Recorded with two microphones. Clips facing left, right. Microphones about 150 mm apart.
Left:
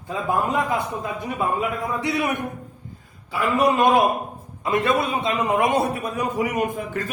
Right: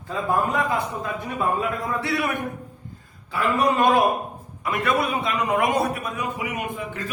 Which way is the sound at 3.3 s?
15° left (ahead or behind).